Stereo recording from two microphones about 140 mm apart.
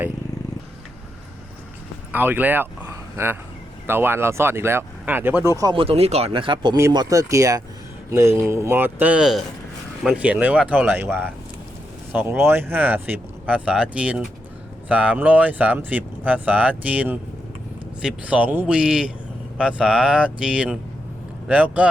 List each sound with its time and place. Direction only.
2.1 s speech: 15° right (ahead or behind)
3.8 s speech: 15° right (ahead or behind)
5.7 s speech: 45° right (ahead or behind)
6.7 s speech: 20° right (ahead or behind)